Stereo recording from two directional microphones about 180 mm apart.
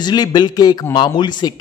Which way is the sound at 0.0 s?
20° left (ahead or behind).